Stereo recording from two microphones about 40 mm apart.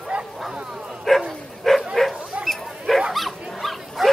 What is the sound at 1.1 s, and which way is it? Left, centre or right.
Dog, centre.